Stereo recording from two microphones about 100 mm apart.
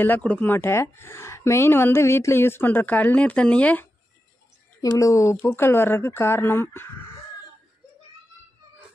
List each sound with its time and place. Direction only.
0.0 s speech: 15° left (ahead or behind)
0.6 s speech: 25° left (ahead or behind)
4.8 s speech: 35° left (ahead or behind)